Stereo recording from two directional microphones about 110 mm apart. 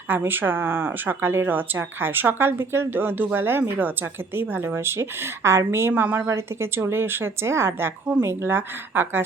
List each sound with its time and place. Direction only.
0.1 s a woman's voice: 20° right (ahead or behind)